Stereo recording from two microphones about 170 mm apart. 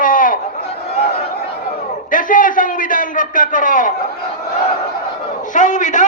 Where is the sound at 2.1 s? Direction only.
50° left (ahead or behind).